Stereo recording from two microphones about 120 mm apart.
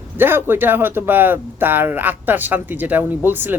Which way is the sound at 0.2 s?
15° right (ahead or behind).